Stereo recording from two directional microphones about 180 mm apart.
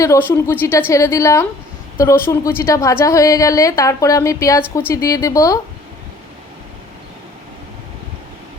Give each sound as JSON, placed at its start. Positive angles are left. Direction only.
{"t": 0.0, "sound": "a woman's voice", "side_deg": 15}